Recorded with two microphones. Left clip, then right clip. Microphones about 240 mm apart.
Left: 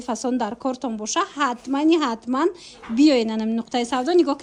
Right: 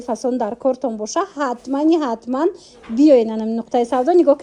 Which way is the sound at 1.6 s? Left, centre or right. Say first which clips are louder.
Right 4 dB; centre.